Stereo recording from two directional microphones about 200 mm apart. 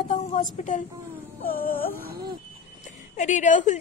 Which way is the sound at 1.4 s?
45° left (ahead or behind).